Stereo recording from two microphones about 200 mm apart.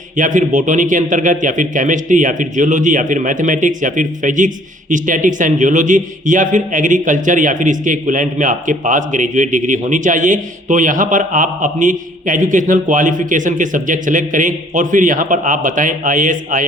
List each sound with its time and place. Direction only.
0.2 s speech: 40° right (ahead or behind)